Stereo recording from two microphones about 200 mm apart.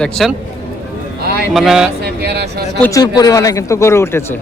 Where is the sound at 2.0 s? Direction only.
55° right (ahead or behind).